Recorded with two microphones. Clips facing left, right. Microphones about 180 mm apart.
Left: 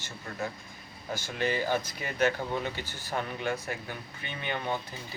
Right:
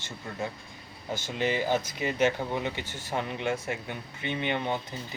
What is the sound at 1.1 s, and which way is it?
Speech, 20° right (ahead or behind).